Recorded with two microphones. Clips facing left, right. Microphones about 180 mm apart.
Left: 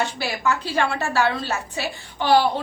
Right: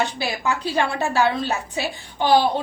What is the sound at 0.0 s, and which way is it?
A woman's voice, 15° right (ahead or behind).